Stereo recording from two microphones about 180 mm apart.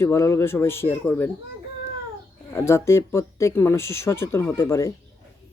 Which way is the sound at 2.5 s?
15° left (ahead or behind).